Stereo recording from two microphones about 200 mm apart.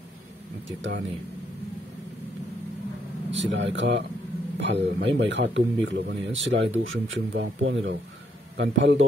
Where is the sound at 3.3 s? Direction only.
65° right (ahead or behind).